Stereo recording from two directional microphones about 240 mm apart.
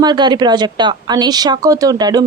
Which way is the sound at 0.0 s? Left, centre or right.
Centre.